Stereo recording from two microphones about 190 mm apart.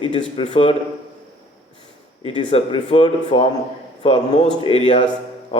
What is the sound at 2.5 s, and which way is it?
Speech, 30° left (ahead or behind).